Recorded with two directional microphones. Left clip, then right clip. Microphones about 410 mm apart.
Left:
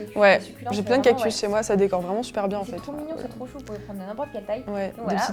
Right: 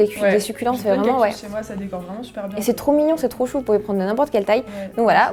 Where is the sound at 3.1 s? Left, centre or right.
Right.